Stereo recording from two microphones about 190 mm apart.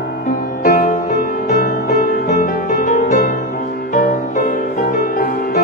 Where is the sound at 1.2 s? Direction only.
50° left (ahead or behind).